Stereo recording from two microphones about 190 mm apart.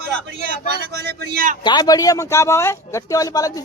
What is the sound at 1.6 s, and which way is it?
Speech, 20° left (ahead or behind).